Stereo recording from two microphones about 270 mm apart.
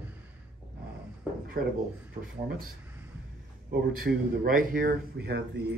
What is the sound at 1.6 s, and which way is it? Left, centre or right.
Speech, right.